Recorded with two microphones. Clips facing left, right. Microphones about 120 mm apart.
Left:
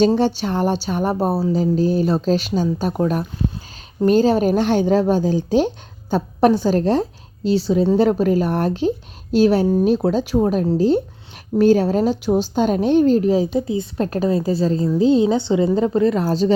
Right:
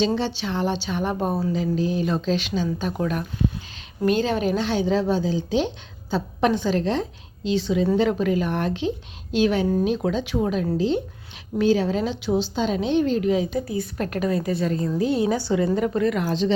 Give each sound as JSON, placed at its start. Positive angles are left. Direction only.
{"t": 0.2, "sound": "a woman's voice", "side_deg": 45}
{"t": 13.6, "sound": "a woman's voice", "side_deg": 25}